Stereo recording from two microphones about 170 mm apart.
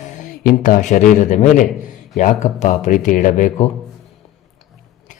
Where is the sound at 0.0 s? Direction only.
45° left (ahead or behind).